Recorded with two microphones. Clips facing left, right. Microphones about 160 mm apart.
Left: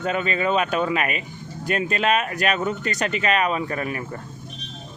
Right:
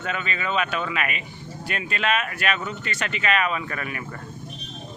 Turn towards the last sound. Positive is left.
turn(degrees=35)  # may be behind; listen again after turning